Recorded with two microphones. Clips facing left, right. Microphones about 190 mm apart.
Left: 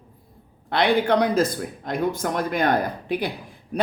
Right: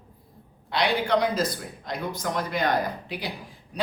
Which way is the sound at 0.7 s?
55° left (ahead or behind).